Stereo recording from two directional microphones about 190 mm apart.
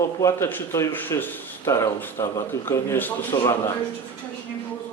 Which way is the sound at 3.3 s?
20° left (ahead or behind).